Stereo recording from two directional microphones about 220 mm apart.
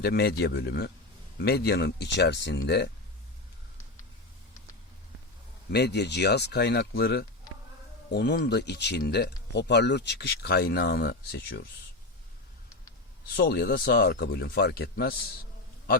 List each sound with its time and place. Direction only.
0.0 s speech: 45° left (ahead or behind)
5.7 s speech: 50° left (ahead or behind)
13.3 s speech: 45° left (ahead or behind)